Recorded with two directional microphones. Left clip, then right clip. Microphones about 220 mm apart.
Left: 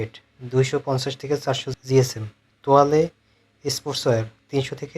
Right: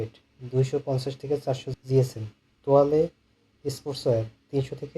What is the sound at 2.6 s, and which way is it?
Speech, 30° left (ahead or behind).